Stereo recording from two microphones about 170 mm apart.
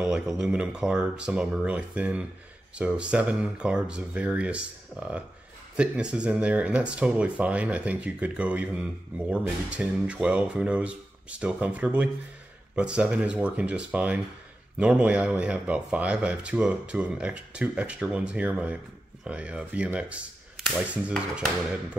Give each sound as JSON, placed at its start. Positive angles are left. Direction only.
{"t": 0.4, "sound": "speech", "side_deg": -5}